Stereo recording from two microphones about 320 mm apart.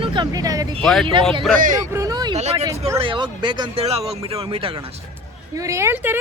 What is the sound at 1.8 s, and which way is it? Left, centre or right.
Speech, centre.